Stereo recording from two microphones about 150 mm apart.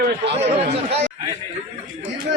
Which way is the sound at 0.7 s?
40° right (ahead or behind).